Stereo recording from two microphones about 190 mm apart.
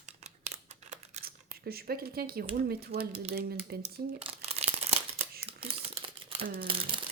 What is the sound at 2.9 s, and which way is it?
Speech, 30° right (ahead or behind).